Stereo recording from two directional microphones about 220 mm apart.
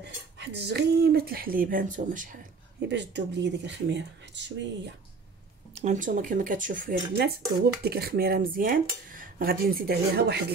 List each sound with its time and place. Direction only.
0.0 s speech: 50° right (ahead or behind)
2.9 s dishes: 50° right (ahead or behind)
5.8 s speech: 35° right (ahead or behind)
7.8 s dishes: 45° right (ahead or behind)